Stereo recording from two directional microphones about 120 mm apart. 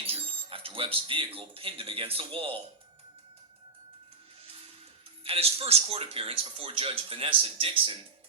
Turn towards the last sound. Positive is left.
turn(degrees=-45)  # may be behind; listen again after turning